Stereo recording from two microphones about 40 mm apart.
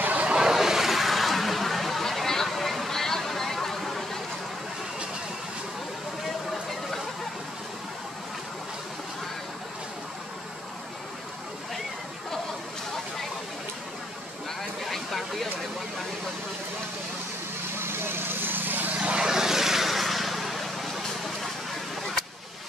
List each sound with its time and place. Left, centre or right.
0.0 s vehicle: right
0.4 s a sound: centre
6.2 s a sound: centre
14.9 s vehicle: centre
17.7 s vehicle: right
19.1 s vehicle: centre